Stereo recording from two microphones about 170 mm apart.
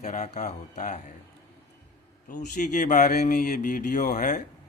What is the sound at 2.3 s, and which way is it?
Speech, 50° left (ahead or behind).